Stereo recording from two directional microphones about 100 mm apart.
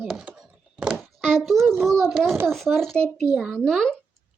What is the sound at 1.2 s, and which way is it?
Speech, 5° left (ahead or behind).